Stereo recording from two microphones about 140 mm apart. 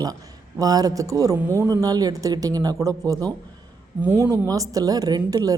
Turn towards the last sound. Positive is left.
turn(degrees=-25)  # may be behind; listen again after turning